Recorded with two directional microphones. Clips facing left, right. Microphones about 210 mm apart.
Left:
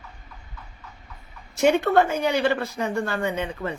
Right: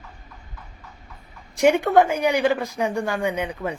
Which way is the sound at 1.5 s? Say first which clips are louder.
Right 2 dB; 15° right (ahead or behind).